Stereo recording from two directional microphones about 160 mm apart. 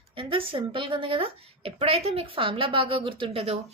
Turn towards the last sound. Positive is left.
turn(degrees=-40)  # may be behind; listen again after turning